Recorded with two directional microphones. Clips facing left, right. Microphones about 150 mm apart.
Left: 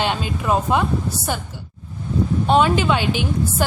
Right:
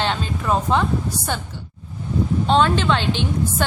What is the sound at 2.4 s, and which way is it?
A woman's voice, 10° left (ahead or behind).